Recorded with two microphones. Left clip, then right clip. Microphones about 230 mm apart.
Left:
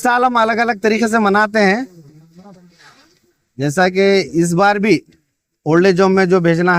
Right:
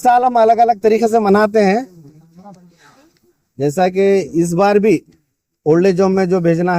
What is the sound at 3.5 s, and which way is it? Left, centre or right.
Speech, left.